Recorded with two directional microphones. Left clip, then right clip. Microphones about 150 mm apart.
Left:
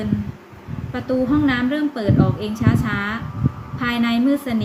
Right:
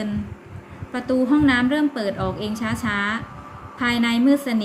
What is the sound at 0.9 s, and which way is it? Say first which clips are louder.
A woman's voice: even; 20° right (ahead or behind).